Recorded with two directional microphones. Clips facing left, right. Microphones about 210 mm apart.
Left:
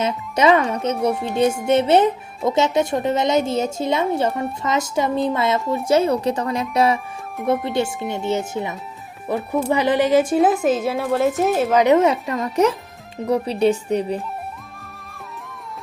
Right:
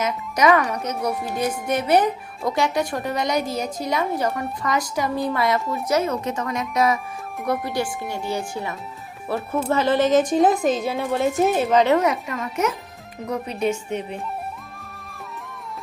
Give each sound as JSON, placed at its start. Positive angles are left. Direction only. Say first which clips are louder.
{"t": 0.0, "sound": "speech", "louder": "left 2 dB", "side_deg": 25}
{"t": 1.1, "sound": "a woman's voice", "louder": "left 3 dB", "side_deg": -5}
{"t": 1.6, "sound": "a woman's voice", "louder": "left 2 dB", "side_deg": 25}
{"t": 11.8, "sound": "speech", "louder": "left 4 dB", "side_deg": 15}
{"t": 12.0, "sound": "speech", "louder": "left 4 dB", "side_deg": 30}